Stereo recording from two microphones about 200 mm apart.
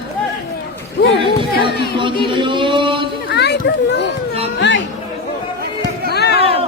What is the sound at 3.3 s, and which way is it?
Children playing, 55° left (ahead or behind).